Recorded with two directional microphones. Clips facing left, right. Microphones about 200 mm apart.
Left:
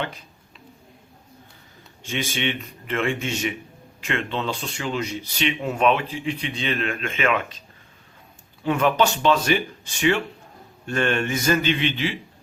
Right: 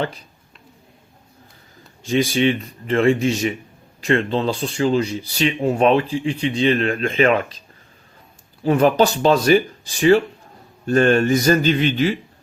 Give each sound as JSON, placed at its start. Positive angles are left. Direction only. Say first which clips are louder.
{"t": 2.0, "sound": "speech", "louder": "right 9 dB", "side_deg": -35}
{"t": 8.6, "sound": "speech", "louder": "right 5 dB", "side_deg": -35}